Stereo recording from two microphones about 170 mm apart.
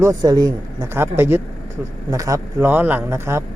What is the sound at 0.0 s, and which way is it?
A man's voice, 20° right (ahead or behind).